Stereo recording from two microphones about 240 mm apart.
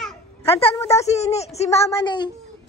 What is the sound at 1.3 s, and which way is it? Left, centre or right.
Speech, left.